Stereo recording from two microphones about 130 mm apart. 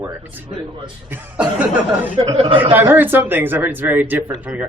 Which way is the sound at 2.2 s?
45° right (ahead or behind).